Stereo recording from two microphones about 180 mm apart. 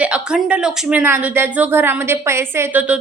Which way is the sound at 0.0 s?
5° right (ahead or behind).